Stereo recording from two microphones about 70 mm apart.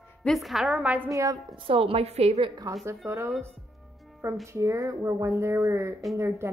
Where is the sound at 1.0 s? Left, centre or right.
Right.